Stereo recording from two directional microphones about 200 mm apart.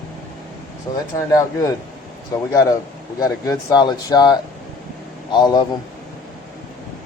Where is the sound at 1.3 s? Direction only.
15° left (ahead or behind).